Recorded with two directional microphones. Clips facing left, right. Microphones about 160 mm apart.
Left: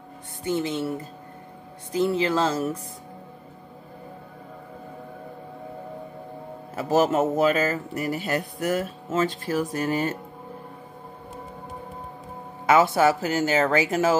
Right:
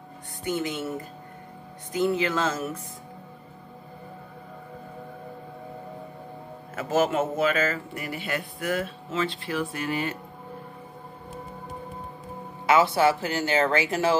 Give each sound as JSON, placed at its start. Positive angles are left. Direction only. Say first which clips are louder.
{"t": 0.4, "sound": "a man's voice", "louder": "left 3 dB", "side_deg": 30}
{"t": 1.9, "sound": "a man's voice", "louder": "left 2 dB", "side_deg": 30}
{"t": 6.7, "sound": "a man's voice", "louder": "left 3 dB", "side_deg": 35}
{"t": 12.6, "sound": "speech", "louder": "left 2 dB", "side_deg": 45}